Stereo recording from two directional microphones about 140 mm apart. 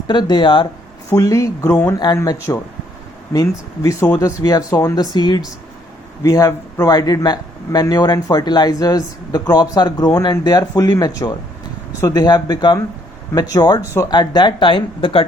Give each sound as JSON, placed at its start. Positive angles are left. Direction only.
{"t": 0.1, "sound": "speech", "side_deg": 30}
{"t": 1.1, "sound": "speech", "side_deg": 25}